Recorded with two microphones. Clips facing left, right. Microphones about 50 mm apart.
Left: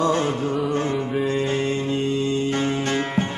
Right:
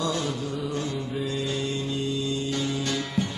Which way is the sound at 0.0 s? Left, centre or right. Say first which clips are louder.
Left 7 dB; left.